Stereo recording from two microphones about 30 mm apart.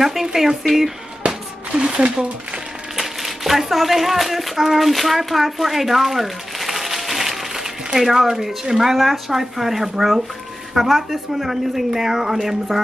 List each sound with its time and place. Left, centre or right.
0.0 s speech: centre
1.8 s speech: right
3.0 s a child's voice: centre
8.9 s speech: centre